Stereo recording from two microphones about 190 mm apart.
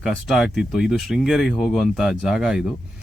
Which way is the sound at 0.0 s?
Centre (ahead or behind).